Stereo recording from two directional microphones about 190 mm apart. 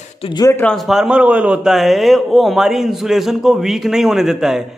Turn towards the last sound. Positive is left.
turn(degrees=0)  # may be behind; listen again after turning